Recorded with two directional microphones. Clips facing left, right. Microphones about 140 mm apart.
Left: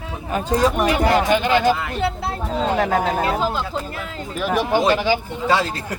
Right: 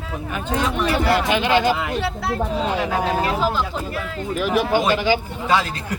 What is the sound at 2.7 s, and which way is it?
Speech, 45° left (ahead or behind).